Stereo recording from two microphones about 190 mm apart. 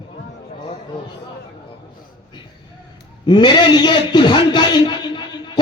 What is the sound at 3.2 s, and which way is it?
A man's voice, 25° left (ahead or behind).